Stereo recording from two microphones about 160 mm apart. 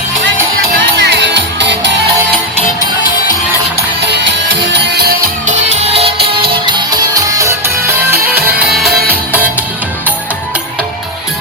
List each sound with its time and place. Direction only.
0.7 s music: 90° right
4.7 s music: 90° right
5.5 s music: 45° right (ahead or behind)
6.2 s music: 35° right (ahead or behind); by 9.5 s 10° right (ahead or behind)